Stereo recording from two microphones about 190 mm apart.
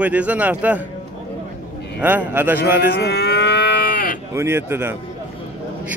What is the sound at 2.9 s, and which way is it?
Cattle, 60° left (ahead or behind).